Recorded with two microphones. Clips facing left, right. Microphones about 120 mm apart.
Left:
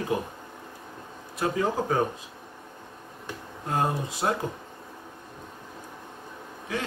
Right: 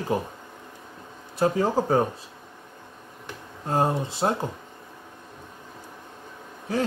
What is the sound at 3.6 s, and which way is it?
Speech, 30° right (ahead or behind).